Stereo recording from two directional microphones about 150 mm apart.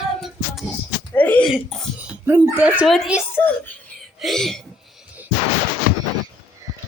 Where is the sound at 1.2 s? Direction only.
10° left (ahead or behind).